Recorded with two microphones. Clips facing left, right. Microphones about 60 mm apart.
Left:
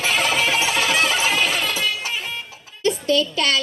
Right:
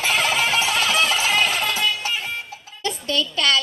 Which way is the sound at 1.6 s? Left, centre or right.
Right.